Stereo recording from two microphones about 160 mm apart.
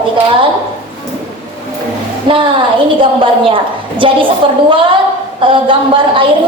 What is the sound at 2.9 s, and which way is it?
A woman's voice, 30° right (ahead or behind).